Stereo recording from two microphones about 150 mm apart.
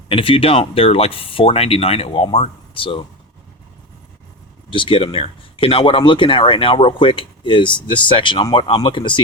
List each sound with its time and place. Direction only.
0.1 s speech: 35° left (ahead or behind)
4.7 s speech: 35° left (ahead or behind)